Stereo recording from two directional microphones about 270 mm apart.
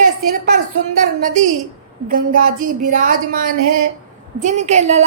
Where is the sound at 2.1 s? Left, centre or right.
Right.